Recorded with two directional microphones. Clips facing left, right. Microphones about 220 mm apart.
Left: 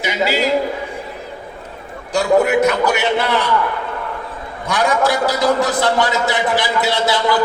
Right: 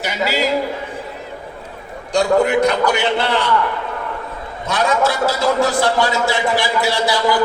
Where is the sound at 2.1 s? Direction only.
5° left (ahead or behind).